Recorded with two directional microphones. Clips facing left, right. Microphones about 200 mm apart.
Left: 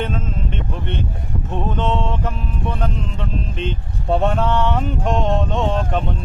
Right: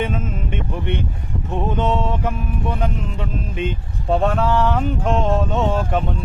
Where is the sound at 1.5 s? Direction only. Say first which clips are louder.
Right 1 dB; 10° right (ahead or behind).